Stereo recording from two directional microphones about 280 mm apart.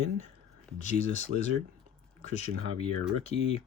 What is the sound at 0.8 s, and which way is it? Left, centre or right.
Speech, left.